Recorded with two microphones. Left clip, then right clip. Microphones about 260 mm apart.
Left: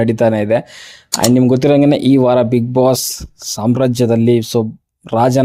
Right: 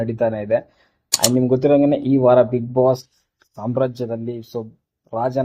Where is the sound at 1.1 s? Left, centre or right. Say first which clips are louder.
Left 5 dB; centre.